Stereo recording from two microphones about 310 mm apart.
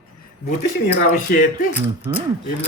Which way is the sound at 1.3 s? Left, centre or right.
Left.